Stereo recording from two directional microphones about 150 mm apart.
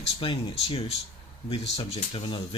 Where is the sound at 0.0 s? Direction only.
40° left (ahead or behind).